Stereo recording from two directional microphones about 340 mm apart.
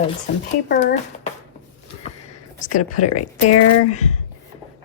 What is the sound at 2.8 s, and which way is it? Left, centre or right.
Speech, left.